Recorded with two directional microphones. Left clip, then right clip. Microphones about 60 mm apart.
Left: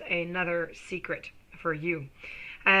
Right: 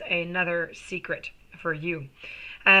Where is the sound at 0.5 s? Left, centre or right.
Left.